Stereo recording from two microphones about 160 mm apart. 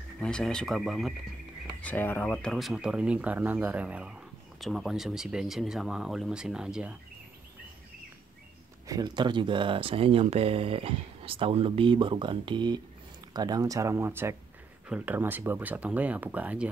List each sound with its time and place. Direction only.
0.2 s speech: 5° left (ahead or behind)
1.8 s speech: 10° left (ahead or behind); by 7.0 s 5° right (ahead or behind)
8.8 s speech: 25° right (ahead or behind); by 16.7 s 10° right (ahead or behind)